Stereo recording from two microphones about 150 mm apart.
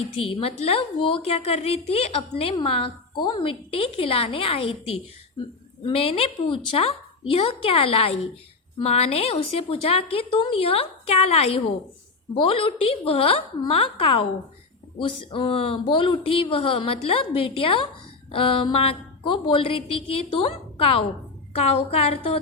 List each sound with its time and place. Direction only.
0.3 s a woman's voice: 40° left (ahead or behind)